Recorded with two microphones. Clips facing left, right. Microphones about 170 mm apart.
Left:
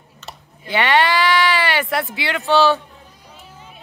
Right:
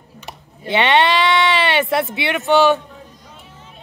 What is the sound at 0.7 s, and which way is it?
Speech, 20° right (ahead or behind).